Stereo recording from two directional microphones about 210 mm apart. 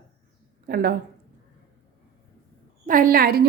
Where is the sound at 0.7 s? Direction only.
45° right (ahead or behind).